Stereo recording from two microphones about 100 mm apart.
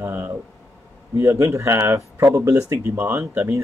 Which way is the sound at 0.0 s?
20° right (ahead or behind).